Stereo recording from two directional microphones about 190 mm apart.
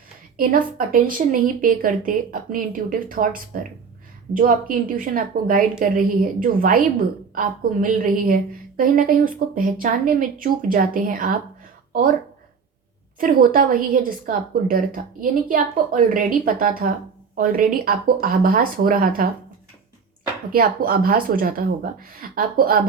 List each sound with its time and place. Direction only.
0.3 s a woman's voice: 45° right (ahead or behind)
13.1 s a woman's voice: 50° right (ahead or behind)
20.5 s a woman's voice: 50° right (ahead or behind)